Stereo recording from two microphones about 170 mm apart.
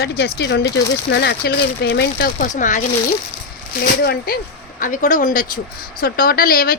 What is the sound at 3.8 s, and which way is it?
Speech, 65° left (ahead or behind).